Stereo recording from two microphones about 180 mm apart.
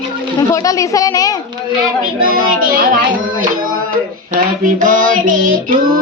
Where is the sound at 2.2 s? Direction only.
50° right (ahead or behind).